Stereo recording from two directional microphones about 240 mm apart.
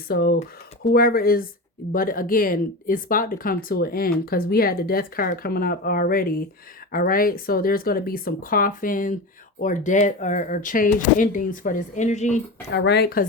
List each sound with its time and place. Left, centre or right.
0.1 s speech: left
12.7 s speech: left